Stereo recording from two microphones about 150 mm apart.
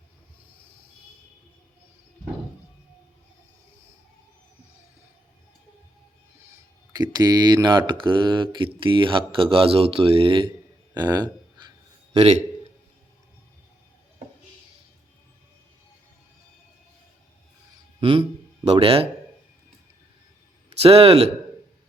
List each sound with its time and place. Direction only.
6.9 s speech: 25° right (ahead or behind)
18.0 s speech: 30° right (ahead or behind)
18.6 s speech: 40° right (ahead or behind)
20.7 s speech: 40° right (ahead or behind)